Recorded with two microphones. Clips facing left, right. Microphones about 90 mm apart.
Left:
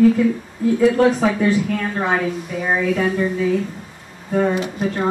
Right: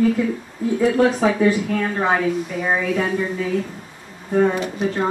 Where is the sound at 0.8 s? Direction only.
Centre (ahead or behind).